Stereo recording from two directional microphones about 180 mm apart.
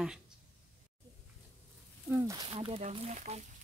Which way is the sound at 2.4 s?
30° right (ahead or behind).